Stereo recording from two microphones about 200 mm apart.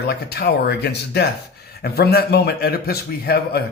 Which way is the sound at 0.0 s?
50° left (ahead or behind).